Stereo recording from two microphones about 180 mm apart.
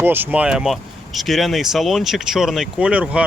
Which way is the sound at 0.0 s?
10° right (ahead or behind).